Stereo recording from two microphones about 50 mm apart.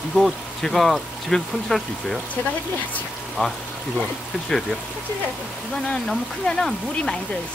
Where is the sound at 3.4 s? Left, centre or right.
Left.